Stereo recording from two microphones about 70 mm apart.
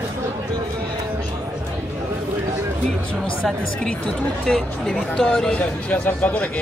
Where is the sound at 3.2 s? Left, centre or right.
Centre.